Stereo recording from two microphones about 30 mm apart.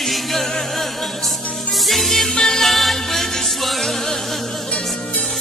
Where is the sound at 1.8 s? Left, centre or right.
Centre.